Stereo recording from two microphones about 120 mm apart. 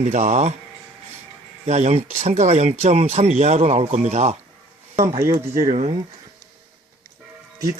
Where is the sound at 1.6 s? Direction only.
65° right (ahead or behind).